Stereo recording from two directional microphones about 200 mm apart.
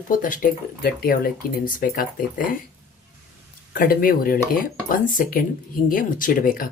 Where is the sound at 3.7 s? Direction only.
45° left (ahead or behind).